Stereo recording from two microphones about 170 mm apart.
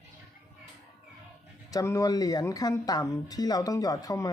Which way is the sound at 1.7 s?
20° left (ahead or behind).